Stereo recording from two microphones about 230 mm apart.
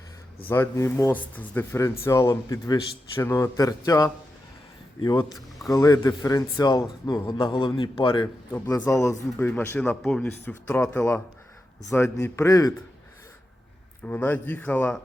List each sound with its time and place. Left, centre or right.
0.4 s a man's voice: centre
14.0 s speech: centre